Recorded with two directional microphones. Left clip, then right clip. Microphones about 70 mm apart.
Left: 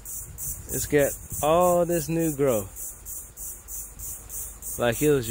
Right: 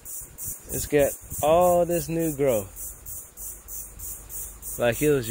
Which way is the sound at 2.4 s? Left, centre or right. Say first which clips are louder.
Right 1 dB; left.